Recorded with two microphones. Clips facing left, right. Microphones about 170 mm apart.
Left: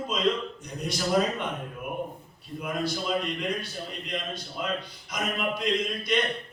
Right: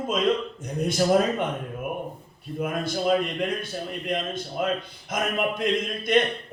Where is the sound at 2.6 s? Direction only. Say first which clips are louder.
Right 3 dB; 50° right (ahead or behind).